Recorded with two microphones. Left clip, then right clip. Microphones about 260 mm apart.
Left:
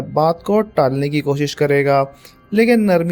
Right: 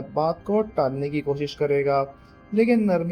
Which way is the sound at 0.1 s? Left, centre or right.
Left.